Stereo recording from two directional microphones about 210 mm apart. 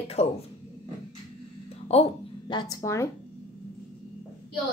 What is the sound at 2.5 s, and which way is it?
Speech, 20° left (ahead or behind).